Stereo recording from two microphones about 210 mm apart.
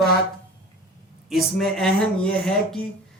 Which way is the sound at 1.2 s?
Centre (ahead or behind).